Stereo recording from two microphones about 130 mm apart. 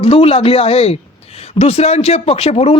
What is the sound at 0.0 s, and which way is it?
Speech, 50° left (ahead or behind).